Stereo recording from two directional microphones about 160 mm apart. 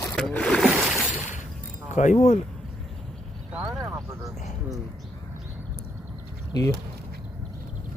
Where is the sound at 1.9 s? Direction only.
50° left (ahead or behind).